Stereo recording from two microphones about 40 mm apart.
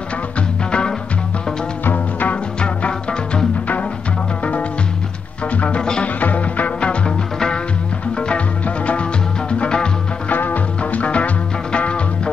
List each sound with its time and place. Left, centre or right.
0.7 s music: left
1.9 s music: left
2.6 s music: left
5.8 s music: left
6.1 s music: left
7.1 s music: centre
8.6 s music: left
10.3 s music: left
10.8 s music: left